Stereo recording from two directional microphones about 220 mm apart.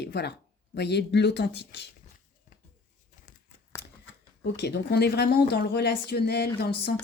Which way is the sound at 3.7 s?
15° left (ahead or behind).